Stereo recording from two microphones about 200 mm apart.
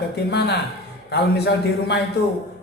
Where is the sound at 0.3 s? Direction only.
55° left (ahead or behind).